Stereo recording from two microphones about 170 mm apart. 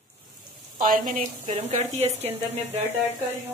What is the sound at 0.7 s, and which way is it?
Speech, 55° right (ahead or behind).